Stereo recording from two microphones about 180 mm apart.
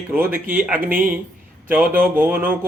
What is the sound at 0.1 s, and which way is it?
Speech, 10° right (ahead or behind).